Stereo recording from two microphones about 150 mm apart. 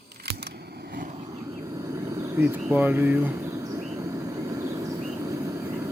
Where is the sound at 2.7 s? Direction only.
10° right (ahead or behind).